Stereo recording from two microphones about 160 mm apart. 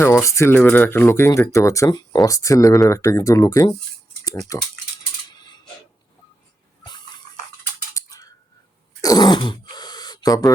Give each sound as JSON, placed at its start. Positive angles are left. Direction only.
{"t": 0.0, "sound": "speech", "side_deg": 15}
{"t": 5.3, "sound": "mechanisms", "side_deg": 25}
{"t": 7.9, "sound": "a sound", "side_deg": 20}
{"t": 9.0, "sound": "throat clearing", "side_deg": 25}